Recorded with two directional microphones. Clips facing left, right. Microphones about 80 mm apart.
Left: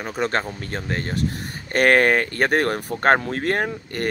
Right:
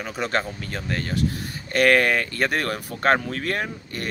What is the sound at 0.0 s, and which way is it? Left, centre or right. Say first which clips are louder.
Speech: left 2 dB; left.